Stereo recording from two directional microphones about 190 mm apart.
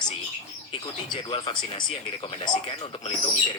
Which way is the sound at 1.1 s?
25° left (ahead or behind).